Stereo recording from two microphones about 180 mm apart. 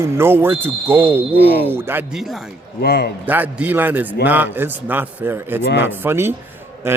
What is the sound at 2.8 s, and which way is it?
Speech, 65° left (ahead or behind).